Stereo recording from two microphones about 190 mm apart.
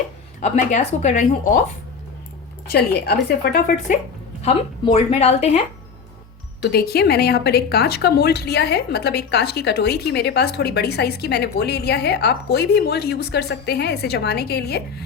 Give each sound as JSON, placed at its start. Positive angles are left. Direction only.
{"t": 0.3, "sound": "a woman's voice", "side_deg": 35}
{"t": 2.6, "sound": "a woman's voice", "side_deg": 55}
{"t": 4.4, "sound": "a woman's voice", "side_deg": 30}
{"t": 6.6, "sound": "speech", "side_deg": 60}